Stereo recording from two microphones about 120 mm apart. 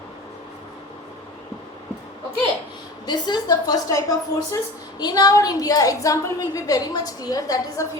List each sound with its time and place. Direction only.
3.1 s a woman's voice: 35° left (ahead or behind)